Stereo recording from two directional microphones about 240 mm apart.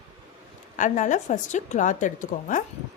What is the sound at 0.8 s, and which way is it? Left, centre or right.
A woman's voice, left.